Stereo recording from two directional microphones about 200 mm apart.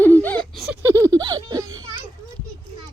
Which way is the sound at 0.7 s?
10° right (ahead or behind).